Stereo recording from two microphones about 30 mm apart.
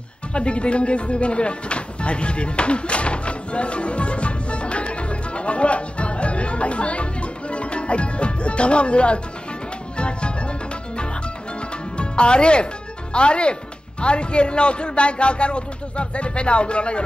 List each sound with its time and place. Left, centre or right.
0.3 s a sound: left
9.9 s music: left
12.0 s speech: left